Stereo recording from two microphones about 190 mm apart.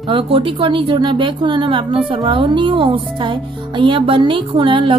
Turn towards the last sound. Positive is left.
turn(degrees=-25)  # may be behind; listen again after turning